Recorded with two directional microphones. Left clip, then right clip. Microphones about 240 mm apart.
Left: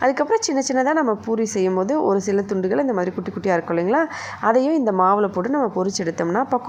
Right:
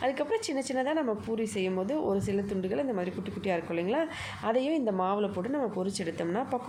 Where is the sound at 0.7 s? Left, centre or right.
Centre.